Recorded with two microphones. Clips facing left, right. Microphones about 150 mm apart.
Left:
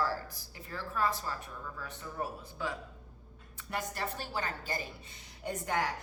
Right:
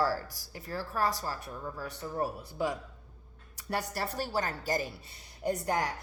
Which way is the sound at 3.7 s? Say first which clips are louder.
Right 3 dB; 35° right (ahead or behind).